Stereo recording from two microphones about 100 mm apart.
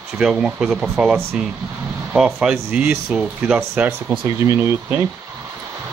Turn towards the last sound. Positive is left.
turn(degrees=-25)  # may be behind; listen again after turning